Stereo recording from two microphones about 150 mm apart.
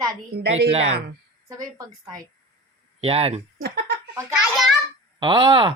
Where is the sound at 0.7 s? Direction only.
45° right (ahead or behind).